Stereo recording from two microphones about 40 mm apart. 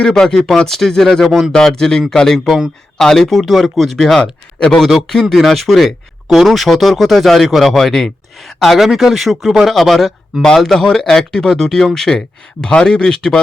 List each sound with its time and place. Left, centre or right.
0.2 s speech: centre
3.2 s speech: centre
4.2 s speech: left
4.9 s speech: centre
10.4 s speech: centre
12.6 s speech: left